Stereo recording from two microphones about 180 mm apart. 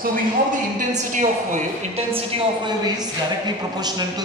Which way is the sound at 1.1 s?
45° right (ahead or behind).